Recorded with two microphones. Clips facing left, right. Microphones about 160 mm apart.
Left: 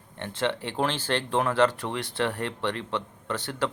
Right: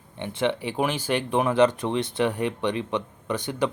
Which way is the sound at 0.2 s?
15° right (ahead or behind).